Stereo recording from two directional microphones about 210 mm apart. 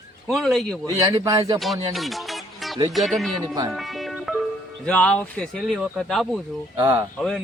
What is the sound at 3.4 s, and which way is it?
Speech, 15° right (ahead or behind).